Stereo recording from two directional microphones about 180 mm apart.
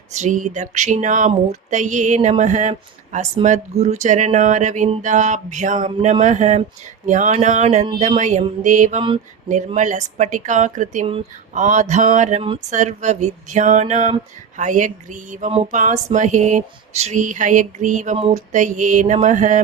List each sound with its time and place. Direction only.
0.1 s speech: 40° right (ahead or behind)
9.0 s mantra: 30° right (ahead or behind)
9.5 s a sound: 45° right (ahead or behind)